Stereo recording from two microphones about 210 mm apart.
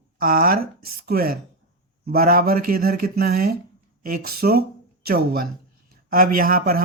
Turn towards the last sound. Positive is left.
turn(degrees=-45)  # may be behind; listen again after turning